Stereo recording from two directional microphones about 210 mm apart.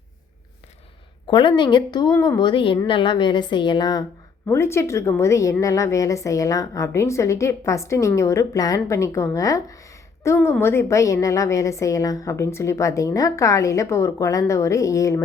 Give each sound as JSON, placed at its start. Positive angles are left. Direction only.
{"t": 1.3, "sound": "a woman's voice", "side_deg": 20}